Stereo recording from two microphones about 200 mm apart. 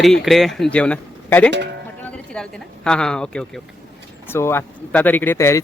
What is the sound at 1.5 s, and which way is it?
Speech, 55° right (ahead or behind).